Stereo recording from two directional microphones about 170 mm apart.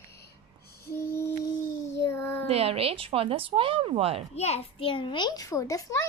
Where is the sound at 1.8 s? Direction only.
15° left (ahead or behind).